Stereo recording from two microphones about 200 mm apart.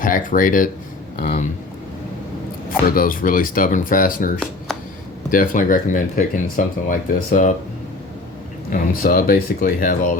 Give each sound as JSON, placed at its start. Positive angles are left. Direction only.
{"t": 0.0, "sound": "speech", "side_deg": 40}
{"t": 2.6, "sound": "speech", "side_deg": 45}
{"t": 5.3, "sound": "speech", "side_deg": 45}
{"t": 8.7, "sound": "speech", "side_deg": 45}